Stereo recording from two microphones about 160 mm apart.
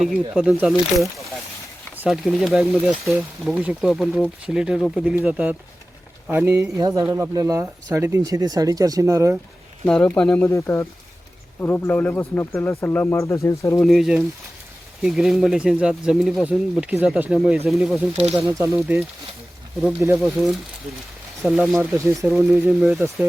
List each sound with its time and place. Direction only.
0.0 s speech: centre (ahead or behind); by 9.4 s 20° right (ahead or behind)
9.8 s speech: 5° left (ahead or behind)
13.8 s speech: centre (ahead or behind)
18.4 s speech: 15° right (ahead or behind)
20.1 s speech: centre (ahead or behind)